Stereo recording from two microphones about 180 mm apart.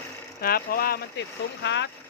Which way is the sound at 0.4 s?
55° left (ahead or behind).